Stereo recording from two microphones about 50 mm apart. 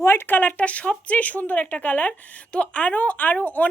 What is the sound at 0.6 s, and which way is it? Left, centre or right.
A woman's voice, left.